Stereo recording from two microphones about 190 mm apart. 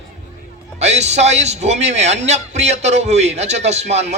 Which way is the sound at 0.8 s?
35° right (ahead or behind).